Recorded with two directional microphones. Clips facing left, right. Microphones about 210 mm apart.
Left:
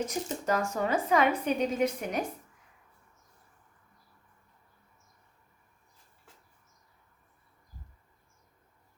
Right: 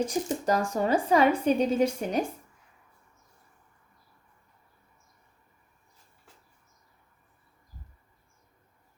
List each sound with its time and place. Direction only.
0.0 s speech: 35° right (ahead or behind)